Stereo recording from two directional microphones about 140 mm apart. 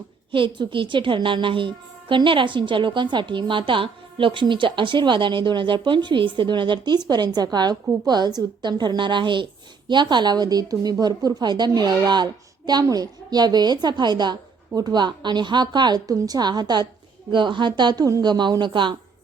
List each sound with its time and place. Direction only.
0.3 s a woman's voice: 35° right (ahead or behind)